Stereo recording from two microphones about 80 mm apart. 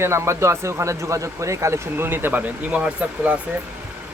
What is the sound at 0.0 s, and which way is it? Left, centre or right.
Speech, right.